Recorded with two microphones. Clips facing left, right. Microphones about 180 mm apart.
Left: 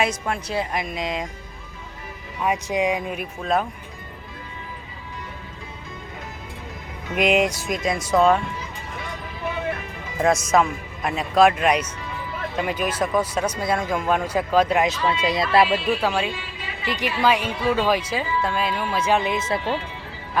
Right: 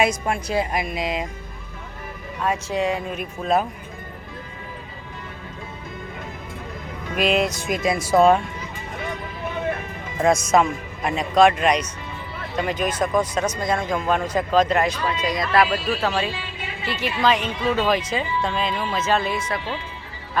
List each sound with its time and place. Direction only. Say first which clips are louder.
0.0 s speech: right 3 dB; 10° right (ahead or behind)
2.4 s a woman's voice: left 1 dB; 15° left (ahead or behind)
3.4 s a man's voice: right 2 dB; 5° right (ahead or behind)
7.2 s a woman's voice: left 1 dB; 15° left (ahead or behind)
7.6 s speech: right 2 dB; 5° right (ahead or behind)
10.2 s a man's voice: right 1 dB; centre (ahead or behind)
15.3 s speech: left 1 dB; 25° left (ahead or behind)
16.0 s a woman's voice: even; 10° left (ahead or behind)